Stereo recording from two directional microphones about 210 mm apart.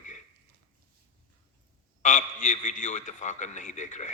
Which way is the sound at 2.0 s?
35° left (ahead or behind).